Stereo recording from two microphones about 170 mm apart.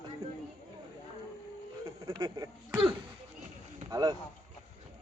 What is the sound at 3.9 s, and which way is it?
Speech, 25° right (ahead or behind).